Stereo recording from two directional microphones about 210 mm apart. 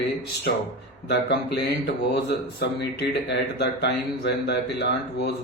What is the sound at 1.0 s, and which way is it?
Speech, 55° left (ahead or behind).